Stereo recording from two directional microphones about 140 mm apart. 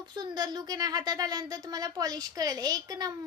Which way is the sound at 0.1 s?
30° right (ahead or behind).